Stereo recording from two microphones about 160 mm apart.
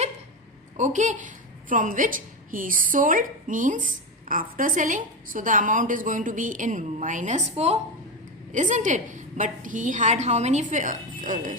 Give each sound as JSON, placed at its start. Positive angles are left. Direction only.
{"t": 0.8, "sound": "a woman's voice", "side_deg": -50}